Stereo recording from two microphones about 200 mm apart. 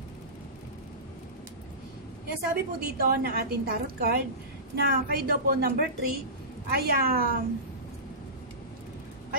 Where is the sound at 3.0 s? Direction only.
50° right (ahead or behind).